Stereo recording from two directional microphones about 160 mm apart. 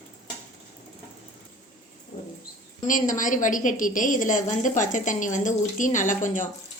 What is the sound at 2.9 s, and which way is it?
A woman's voice, 55° left (ahead or behind).